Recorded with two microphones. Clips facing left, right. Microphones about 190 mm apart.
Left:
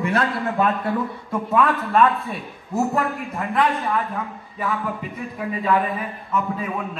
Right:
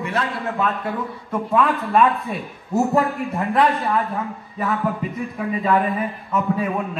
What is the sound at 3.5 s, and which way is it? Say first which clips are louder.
Speech: right 2 dB; 35° right (ahead or behind).